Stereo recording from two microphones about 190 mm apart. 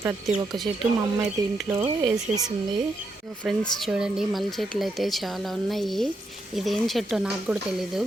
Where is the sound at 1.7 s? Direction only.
20° right (ahead or behind).